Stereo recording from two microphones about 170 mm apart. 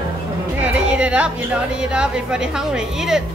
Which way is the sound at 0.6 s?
5° right (ahead or behind).